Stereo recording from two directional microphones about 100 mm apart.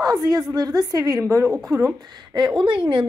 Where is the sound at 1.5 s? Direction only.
Centre (ahead or behind).